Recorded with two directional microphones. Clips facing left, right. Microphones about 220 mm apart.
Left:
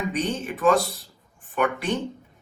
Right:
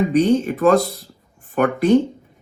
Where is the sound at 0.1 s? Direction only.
40° right (ahead or behind).